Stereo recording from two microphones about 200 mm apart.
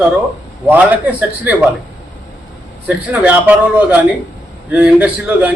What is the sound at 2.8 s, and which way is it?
A man's voice, 10° right (ahead or behind).